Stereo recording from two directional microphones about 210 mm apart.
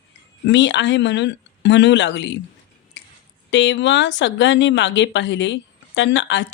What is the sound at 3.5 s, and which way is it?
Speech, 60° left (ahead or behind).